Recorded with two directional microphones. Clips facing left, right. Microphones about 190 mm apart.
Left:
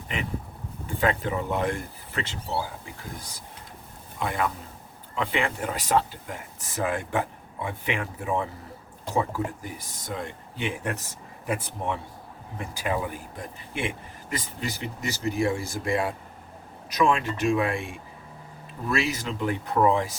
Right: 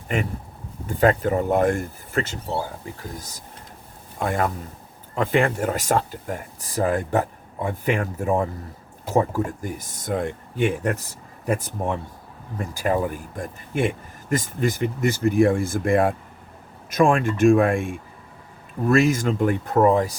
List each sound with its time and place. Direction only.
0.1 s speech: 45° right (ahead or behind)